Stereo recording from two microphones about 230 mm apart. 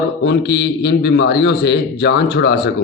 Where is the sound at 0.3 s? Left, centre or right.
Left.